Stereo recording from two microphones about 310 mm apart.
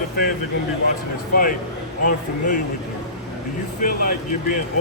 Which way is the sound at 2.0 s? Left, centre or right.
Left.